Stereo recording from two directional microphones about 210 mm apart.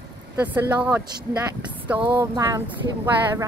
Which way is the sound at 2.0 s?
20° right (ahead or behind).